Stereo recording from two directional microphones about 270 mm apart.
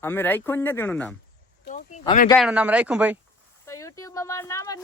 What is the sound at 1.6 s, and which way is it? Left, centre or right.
Speech, left.